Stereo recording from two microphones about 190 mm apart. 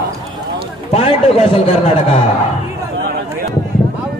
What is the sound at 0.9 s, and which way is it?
A man's voice, 30° left (ahead or behind).